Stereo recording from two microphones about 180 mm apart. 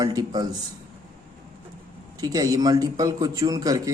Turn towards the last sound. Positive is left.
turn(degrees=-20)  # may be behind; listen again after turning